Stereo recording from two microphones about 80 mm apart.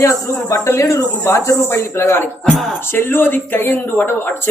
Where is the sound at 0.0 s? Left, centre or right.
Left.